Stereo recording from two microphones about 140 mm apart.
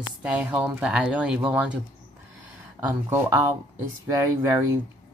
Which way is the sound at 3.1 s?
15° right (ahead or behind).